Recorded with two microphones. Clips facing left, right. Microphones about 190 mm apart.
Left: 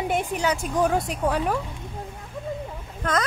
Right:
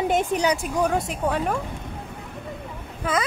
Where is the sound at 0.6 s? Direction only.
Centre (ahead or behind).